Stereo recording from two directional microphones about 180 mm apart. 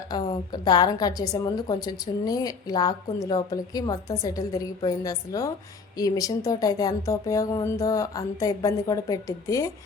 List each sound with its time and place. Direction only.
0.1 s a woman's voice: 25° left (ahead or behind)